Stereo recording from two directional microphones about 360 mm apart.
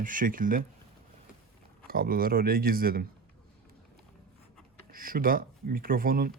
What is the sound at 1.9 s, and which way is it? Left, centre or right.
Speech, right.